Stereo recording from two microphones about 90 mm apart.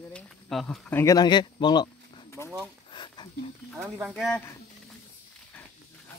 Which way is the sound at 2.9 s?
60° left (ahead or behind).